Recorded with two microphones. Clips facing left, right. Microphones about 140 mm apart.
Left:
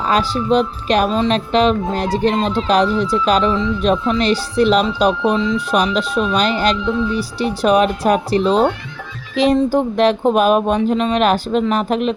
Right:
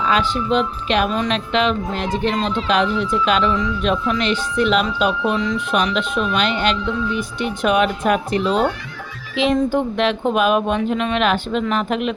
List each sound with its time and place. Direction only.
0.0 s speech: 40° left (ahead or behind)